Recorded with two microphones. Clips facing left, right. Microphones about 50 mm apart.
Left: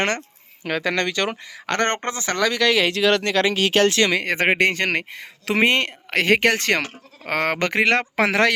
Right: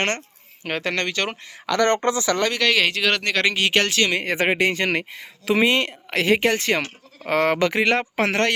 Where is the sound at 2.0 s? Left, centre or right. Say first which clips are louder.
Right 5 dB; left.